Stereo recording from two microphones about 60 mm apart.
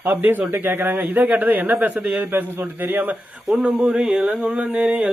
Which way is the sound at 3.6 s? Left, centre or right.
Centre.